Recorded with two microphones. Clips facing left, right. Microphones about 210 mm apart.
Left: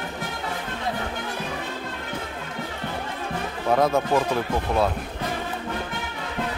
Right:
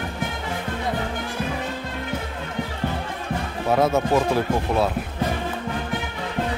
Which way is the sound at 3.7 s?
5° right (ahead or behind).